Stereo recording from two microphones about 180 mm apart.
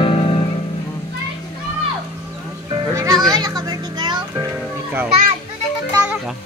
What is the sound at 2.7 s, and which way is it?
Music, 20° right (ahead or behind).